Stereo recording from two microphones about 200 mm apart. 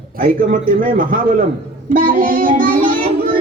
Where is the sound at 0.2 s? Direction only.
45° right (ahead or behind).